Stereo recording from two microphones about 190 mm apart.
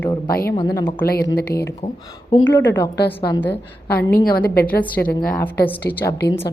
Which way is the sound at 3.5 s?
55° left (ahead or behind).